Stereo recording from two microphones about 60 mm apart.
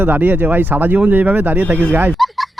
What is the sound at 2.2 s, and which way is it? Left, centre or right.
Fowl, centre.